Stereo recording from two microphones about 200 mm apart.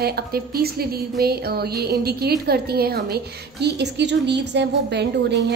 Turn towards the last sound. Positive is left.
turn(degrees=-60)  # may be behind; listen again after turning